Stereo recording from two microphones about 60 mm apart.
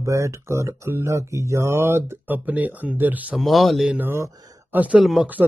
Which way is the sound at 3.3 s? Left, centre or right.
Centre.